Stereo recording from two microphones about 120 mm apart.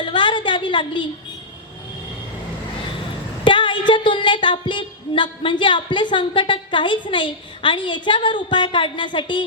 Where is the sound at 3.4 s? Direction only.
40° left (ahead or behind).